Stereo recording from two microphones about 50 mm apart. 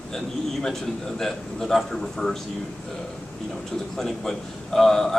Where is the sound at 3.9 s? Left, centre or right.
Centre.